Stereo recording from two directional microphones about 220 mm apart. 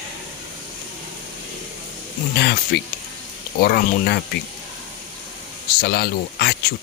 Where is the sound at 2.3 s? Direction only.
50° left (ahead or behind).